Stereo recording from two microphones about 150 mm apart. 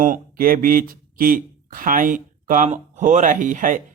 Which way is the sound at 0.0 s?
70° right (ahead or behind).